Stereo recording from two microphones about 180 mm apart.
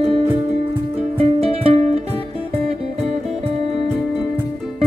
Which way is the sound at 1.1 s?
35° right (ahead or behind).